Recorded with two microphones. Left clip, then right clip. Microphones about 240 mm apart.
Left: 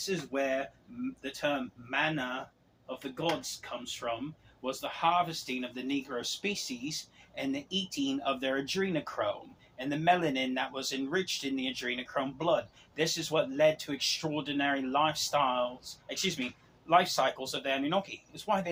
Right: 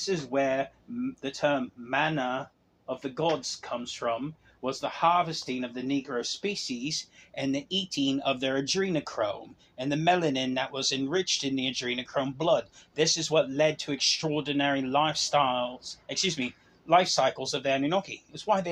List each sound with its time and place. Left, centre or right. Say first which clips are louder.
0.1 s speech: right 5 dB; right
1.9 s speech: right 4 dB; right